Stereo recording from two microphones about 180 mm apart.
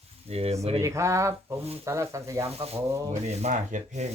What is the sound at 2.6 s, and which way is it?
Rub, 35° right (ahead or behind).